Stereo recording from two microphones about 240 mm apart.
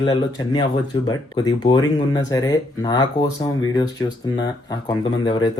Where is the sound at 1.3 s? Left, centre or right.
Centre.